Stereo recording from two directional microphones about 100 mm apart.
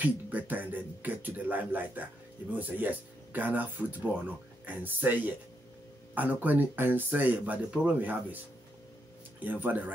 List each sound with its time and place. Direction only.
0.0 s speech: 15° right (ahead or behind)
9.4 s speech: 20° right (ahead or behind)